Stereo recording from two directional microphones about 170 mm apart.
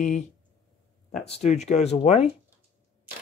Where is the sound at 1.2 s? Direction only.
40° left (ahead or behind).